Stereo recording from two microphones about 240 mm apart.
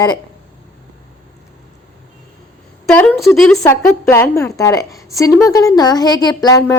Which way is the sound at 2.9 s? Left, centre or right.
Centre.